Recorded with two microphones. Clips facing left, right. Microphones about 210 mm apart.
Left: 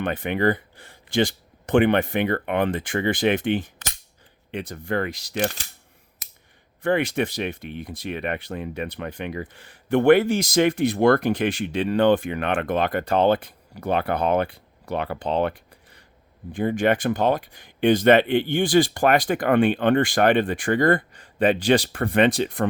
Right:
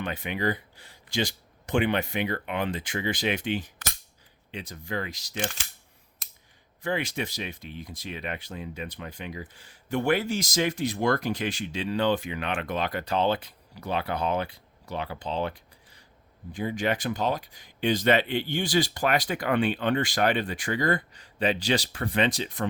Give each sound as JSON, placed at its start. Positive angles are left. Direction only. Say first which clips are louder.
{"t": 0.0, "sound": "speech", "louder": "left 7 dB", "side_deg": 55}
{"t": 6.8, "sound": "speech", "louder": "left 8 dB", "side_deg": 55}